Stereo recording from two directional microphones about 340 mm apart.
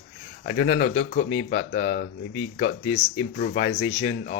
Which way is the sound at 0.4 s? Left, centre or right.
Left.